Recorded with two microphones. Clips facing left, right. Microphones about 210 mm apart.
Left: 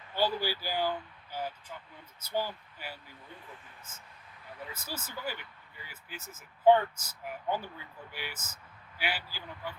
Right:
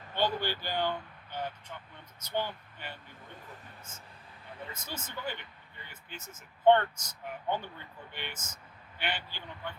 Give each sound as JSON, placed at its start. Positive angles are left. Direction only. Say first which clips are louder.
{"t": 0.1, "sound": "speech", "louder": "left 1 dB", "side_deg": 5}
{"t": 4.7, "sound": "speech", "louder": "left 1 dB", "side_deg": 10}